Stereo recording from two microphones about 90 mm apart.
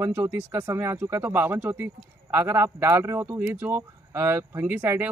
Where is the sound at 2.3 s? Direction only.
30° right (ahead or behind).